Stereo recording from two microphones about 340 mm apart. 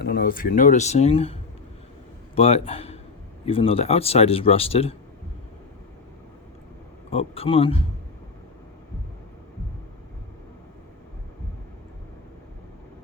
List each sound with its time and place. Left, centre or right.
0.0 s speech: left
7.1 s speech: centre